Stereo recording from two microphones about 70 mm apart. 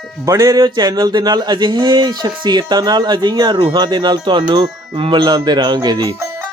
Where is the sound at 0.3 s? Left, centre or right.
Right.